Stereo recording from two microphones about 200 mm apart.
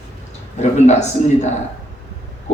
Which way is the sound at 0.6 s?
35° left (ahead or behind).